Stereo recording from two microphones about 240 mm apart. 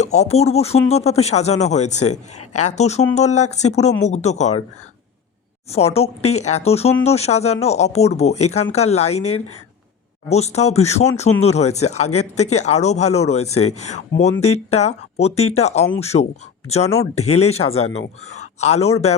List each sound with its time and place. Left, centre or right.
0.0 s speech: left
5.7 s speech: left
10.2 s speech: left
12.0 s speech: left
12.4 s speech: left
13.5 s speech: left
13.7 s a man's voice: left